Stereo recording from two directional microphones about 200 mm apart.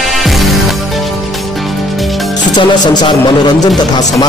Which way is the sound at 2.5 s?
20° left (ahead or behind).